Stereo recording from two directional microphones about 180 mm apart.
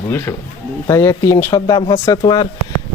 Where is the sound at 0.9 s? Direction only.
15° left (ahead or behind).